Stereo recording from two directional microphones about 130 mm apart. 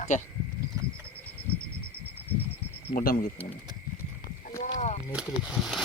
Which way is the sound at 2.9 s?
90° left.